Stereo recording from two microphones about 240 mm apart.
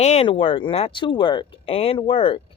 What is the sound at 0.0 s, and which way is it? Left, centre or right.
Speech, left.